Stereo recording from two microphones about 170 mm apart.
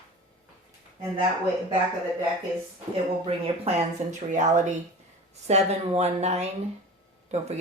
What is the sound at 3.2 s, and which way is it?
Speech, 35° right (ahead or behind).